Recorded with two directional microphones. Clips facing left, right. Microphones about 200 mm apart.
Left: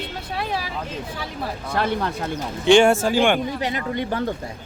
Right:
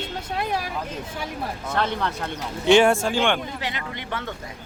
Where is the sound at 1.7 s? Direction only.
10° left (ahead or behind).